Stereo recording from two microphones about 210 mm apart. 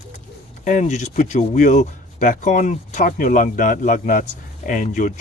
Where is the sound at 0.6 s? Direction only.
35° left (ahead or behind).